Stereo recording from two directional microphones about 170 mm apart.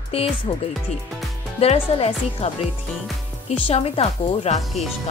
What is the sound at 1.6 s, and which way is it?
Speech, 35° left (ahead or behind).